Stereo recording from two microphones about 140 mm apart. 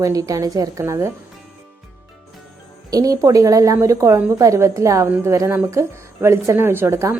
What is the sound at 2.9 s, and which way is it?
A woman's voice, 25° right (ahead or behind).